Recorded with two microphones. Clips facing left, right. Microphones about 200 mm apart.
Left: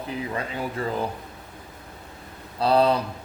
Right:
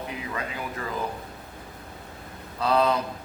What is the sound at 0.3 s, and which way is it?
Speech, 30° left (ahead or behind).